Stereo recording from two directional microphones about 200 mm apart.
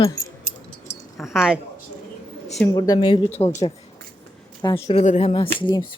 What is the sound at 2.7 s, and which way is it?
Speech, 20° left (ahead or behind).